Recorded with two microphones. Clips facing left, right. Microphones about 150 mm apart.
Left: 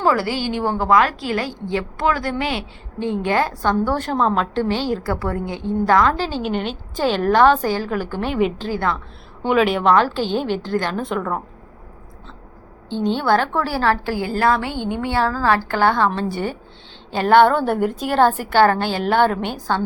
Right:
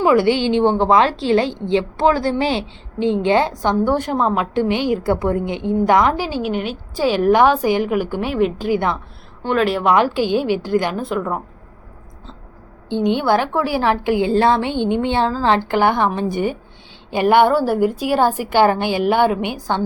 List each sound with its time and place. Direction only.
0.0 s a woman's voice: 20° right (ahead or behind)
9.5 s speech: centre (ahead or behind)
9.9 s a woman's voice: 15° right (ahead or behind)
12.9 s a woman's voice: 15° right (ahead or behind)